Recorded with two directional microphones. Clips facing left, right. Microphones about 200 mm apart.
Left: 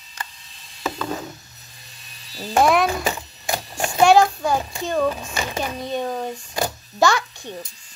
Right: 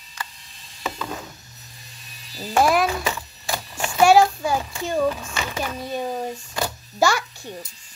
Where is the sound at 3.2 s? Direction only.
30° left (ahead or behind).